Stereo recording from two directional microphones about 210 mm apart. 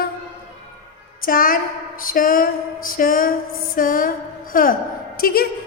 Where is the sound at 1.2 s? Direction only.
40° left (ahead or behind).